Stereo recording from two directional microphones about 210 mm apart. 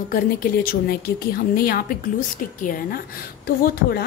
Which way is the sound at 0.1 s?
45° left (ahead or behind).